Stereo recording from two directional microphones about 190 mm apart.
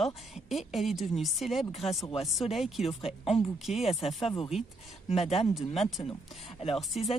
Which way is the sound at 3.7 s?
Centre (ahead or behind).